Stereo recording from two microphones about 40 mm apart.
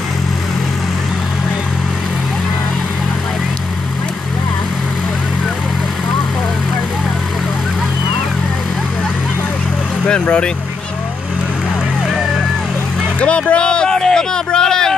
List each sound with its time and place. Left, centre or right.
10.0 s speech: left
13.2 s music: left
13.9 s a sound: centre